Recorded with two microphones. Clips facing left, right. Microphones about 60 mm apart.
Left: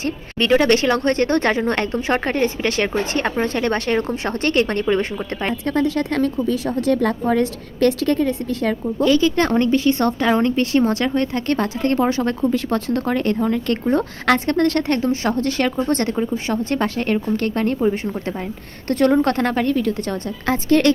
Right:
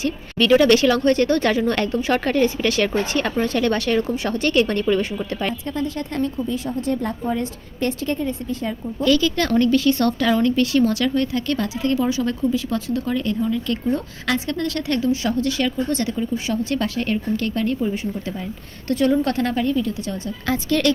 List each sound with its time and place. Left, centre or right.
0.0 s speech: left
5.5 s speech: left
9.0 s a woman's voice: left
20.5 s speech: left